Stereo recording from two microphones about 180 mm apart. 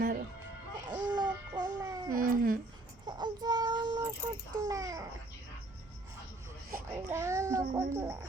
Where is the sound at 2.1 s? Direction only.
50° right (ahead or behind).